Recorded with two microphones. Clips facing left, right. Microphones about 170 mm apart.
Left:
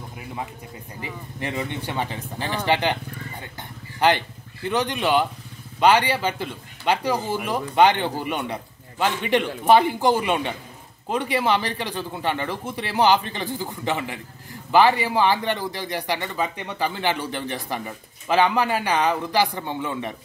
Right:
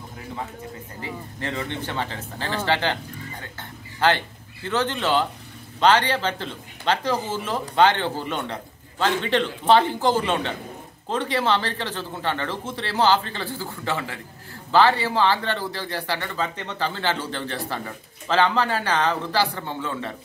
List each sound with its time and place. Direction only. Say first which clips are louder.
1.0 s speech: even; 15° left (ahead or behind)